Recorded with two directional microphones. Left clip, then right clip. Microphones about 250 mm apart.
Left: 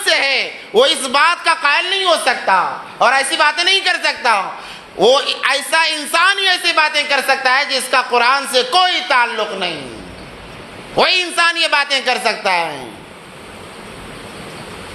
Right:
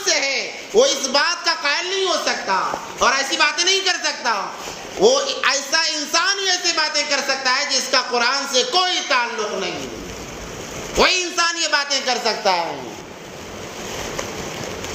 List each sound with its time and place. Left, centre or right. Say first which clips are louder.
0.0 s a sound: left 5 dB; left
1.1 s a man's voice: left 6 dB; left
10.9 s a man's voice: left 3 dB; left